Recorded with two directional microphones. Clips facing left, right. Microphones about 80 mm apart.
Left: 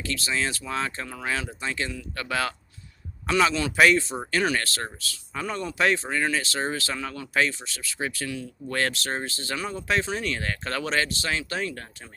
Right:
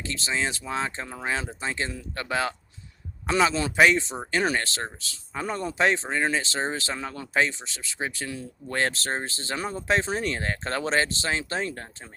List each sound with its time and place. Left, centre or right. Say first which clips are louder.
0.0 s speech: left 1 dB; right
2.2 s speech: right 1 dB; right